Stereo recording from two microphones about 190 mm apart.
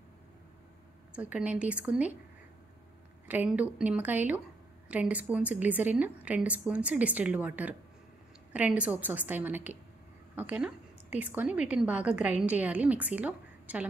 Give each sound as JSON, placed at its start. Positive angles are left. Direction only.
{"t": 1.1, "sound": "a woman's voice", "side_deg": -5}
{"t": 3.3, "sound": "a woman's voice", "side_deg": -10}